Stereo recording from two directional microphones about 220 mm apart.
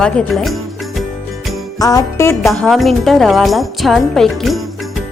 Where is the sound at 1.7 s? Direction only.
15° left (ahead or behind).